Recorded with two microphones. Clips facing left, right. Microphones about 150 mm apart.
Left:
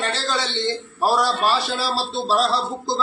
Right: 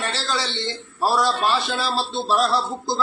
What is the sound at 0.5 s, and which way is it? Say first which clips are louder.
Speech: left 5 dB; 15° left (ahead or behind).